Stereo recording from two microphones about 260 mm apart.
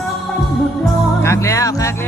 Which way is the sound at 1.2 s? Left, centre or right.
Centre.